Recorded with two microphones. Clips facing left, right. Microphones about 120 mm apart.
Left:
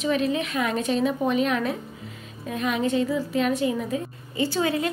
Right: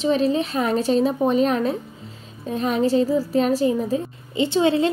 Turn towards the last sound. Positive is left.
turn(degrees=-25)  # may be behind; listen again after turning